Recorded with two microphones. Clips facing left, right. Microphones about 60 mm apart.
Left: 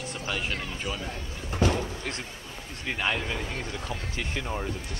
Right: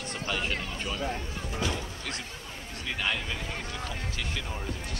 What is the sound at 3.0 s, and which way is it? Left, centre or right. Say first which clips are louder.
Speech: left 3 dB; left.